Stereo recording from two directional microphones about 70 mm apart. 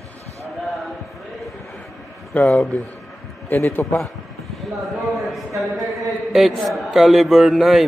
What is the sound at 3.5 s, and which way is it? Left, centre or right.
Speech, left.